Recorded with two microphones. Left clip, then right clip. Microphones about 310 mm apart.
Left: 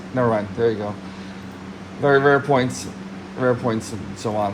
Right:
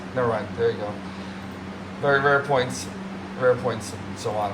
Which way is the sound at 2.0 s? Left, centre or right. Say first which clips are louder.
Left 4 dB; centre.